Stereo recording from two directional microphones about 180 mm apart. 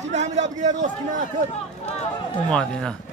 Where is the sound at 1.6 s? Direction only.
35° left (ahead or behind).